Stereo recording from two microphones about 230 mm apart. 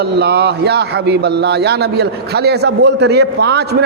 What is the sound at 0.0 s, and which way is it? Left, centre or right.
A man's voice, right.